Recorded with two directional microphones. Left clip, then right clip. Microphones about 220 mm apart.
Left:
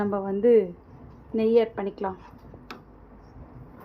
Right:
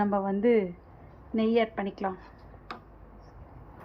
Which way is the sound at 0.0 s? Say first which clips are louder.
Left 3 dB; 20° right (ahead or behind).